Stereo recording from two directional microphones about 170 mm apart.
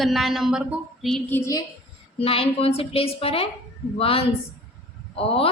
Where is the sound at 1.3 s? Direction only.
20° left (ahead or behind).